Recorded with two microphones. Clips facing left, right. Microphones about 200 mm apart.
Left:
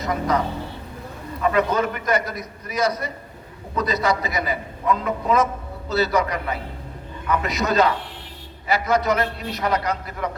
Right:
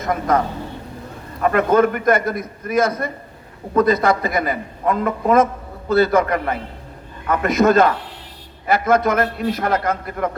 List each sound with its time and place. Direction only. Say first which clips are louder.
0.0 s a man's voice: right 3 dB; 50° right (ahead or behind)